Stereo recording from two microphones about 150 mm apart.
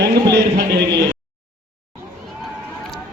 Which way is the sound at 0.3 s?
90° right.